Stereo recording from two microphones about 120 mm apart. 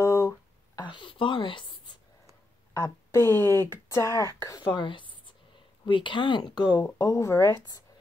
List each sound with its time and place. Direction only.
0.0 s a sound: 25° left (ahead or behind)
0.7 s a woman's voice: 40° left (ahead or behind)
2.7 s speech: 25° left (ahead or behind)
4.7 s speech: 40° left (ahead or behind)
6.8 s speech: 25° left (ahead or behind)